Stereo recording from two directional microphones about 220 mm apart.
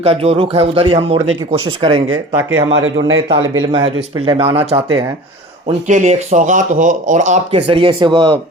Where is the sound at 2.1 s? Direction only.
10° right (ahead or behind); by 7.3 s 35° right (ahead or behind).